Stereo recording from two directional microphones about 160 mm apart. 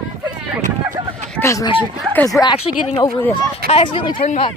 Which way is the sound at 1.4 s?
20° left (ahead or behind).